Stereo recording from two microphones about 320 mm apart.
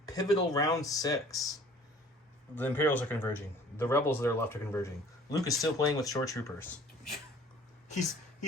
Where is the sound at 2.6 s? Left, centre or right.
Centre.